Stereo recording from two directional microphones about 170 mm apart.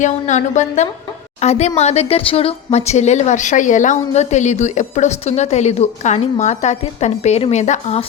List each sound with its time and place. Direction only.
0.0 s a woman's voice: 45° left (ahead or behind)